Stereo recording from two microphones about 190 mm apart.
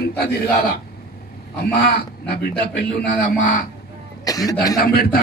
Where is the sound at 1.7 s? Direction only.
55° left (ahead or behind).